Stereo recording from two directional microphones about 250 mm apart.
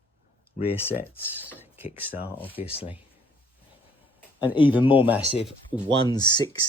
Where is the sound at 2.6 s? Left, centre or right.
Left.